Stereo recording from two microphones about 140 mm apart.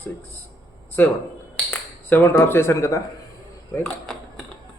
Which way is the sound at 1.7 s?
15° left (ahead or behind).